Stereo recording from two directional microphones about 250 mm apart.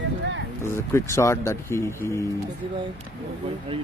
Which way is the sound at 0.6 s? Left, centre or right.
Centre.